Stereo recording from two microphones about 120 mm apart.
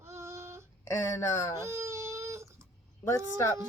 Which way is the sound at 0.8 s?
25° left (ahead or behind).